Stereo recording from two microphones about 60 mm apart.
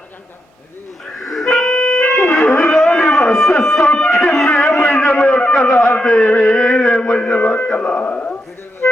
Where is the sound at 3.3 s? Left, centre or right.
Centre.